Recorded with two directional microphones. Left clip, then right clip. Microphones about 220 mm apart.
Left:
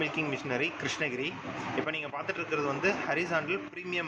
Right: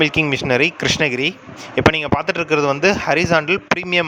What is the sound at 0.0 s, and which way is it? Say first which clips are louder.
Speech: right 15 dB; 50° right (ahead or behind).